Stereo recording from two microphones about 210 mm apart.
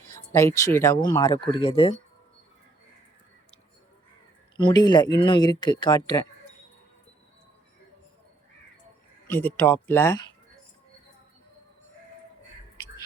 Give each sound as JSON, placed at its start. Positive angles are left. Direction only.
{"t": 0.1, "sound": "speech", "side_deg": 15}
{"t": 4.5, "sound": "speech", "side_deg": 20}
{"t": 9.2, "sound": "speech", "side_deg": 10}